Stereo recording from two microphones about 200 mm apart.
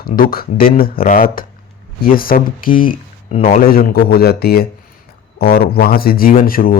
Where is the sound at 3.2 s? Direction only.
30° left (ahead or behind).